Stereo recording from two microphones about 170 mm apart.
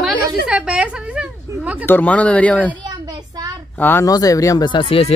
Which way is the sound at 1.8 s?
10° left (ahead or behind).